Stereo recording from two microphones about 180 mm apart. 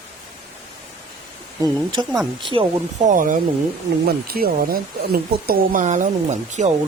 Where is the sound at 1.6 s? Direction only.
20° right (ahead or behind).